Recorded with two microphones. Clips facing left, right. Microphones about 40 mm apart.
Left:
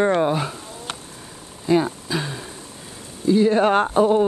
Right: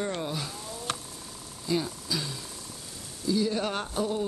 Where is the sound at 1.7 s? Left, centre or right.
Left.